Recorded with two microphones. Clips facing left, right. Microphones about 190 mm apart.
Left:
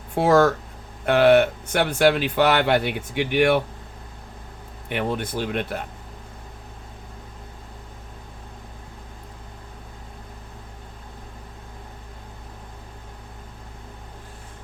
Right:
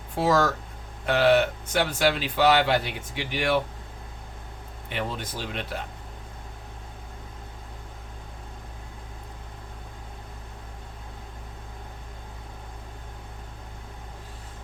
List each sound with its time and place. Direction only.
0.2 s speech: 55° left (ahead or behind)
4.9 s speech: 55° left (ahead or behind)